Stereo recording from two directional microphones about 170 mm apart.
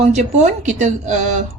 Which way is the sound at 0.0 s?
40° right (ahead or behind).